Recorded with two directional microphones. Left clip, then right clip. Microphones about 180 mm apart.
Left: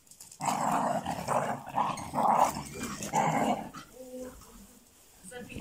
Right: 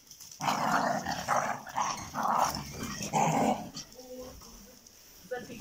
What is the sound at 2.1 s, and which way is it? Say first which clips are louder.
Dog: left 4 dB; 20° left (ahead or behind).